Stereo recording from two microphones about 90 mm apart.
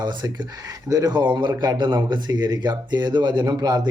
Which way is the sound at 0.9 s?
45° right (ahead or behind).